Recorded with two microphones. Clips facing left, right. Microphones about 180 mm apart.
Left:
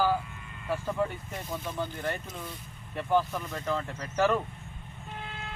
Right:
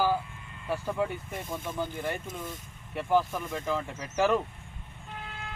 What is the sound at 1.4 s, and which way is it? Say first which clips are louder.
Speech: left 2 dB; 25° right (ahead or behind).